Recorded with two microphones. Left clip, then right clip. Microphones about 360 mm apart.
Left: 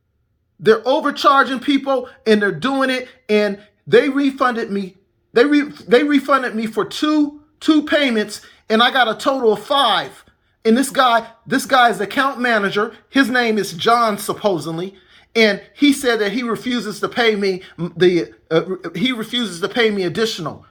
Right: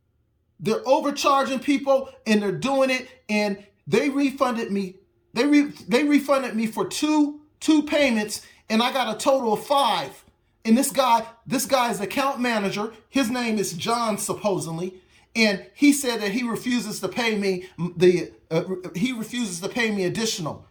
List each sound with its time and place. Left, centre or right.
0.9 s speech: centre
19.0 s speech: right
19.5 s speech: centre